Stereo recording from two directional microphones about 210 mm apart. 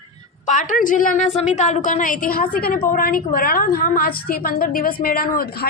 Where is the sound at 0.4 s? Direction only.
35° left (ahead or behind).